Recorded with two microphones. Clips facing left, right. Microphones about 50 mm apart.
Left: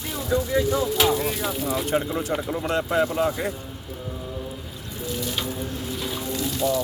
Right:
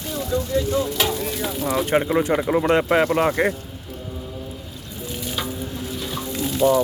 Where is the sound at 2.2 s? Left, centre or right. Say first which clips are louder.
Right 7 dB; right.